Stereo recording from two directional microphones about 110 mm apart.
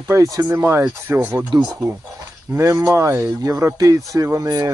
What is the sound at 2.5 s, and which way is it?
Speech, 30° right (ahead or behind).